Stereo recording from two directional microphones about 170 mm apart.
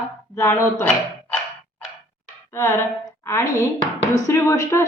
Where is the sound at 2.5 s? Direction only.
15° left (ahead or behind).